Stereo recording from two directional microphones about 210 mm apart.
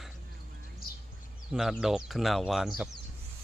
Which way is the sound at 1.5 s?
Centre (ahead or behind).